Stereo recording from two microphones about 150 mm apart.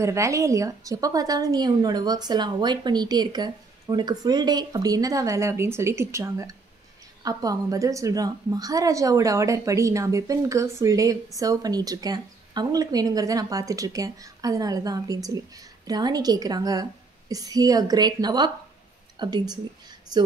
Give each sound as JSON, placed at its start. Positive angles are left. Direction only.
{"t": 0.0, "sound": "a woman's voice", "side_deg": -20}